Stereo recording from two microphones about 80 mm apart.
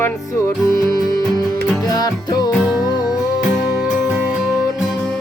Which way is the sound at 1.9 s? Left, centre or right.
Left.